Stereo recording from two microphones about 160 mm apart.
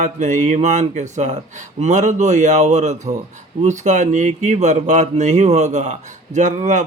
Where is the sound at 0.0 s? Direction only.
50° right (ahead or behind).